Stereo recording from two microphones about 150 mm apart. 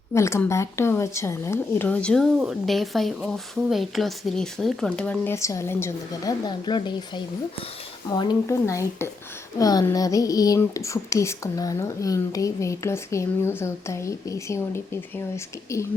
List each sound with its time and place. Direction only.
0.1 s a woman's voice: 20° left (ahead or behind)
6.4 s speech: 30° left (ahead or behind)
8.1 s speech: 30° left (ahead or behind)
8.4 s speech: 20° left (ahead or behind)